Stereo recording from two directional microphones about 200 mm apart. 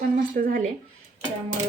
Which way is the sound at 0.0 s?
45° right (ahead or behind).